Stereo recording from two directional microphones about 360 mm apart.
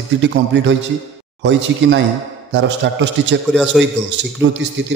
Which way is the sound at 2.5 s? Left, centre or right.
Right.